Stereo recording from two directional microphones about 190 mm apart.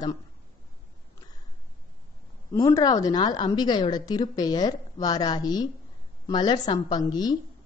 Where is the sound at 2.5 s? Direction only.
20° left (ahead or behind).